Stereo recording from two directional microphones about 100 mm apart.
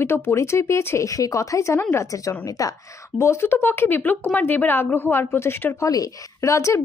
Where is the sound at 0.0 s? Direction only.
25° left (ahead or behind).